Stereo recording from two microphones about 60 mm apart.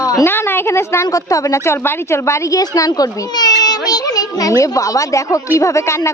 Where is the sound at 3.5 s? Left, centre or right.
Left.